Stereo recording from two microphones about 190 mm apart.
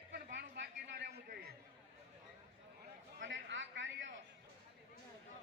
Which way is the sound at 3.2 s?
75° right (ahead or behind).